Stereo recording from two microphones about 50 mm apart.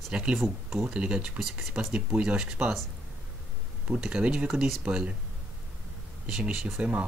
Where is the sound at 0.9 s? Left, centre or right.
Right.